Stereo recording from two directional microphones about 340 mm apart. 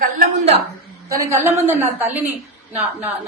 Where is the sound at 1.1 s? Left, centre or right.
Centre.